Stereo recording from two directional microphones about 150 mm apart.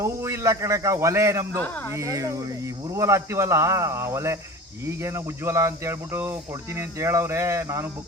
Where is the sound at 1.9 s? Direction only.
20° right (ahead or behind).